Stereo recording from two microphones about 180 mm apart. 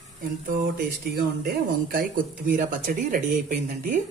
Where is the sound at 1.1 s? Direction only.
60° right (ahead or behind).